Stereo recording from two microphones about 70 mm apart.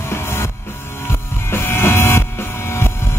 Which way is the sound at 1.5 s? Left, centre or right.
Left.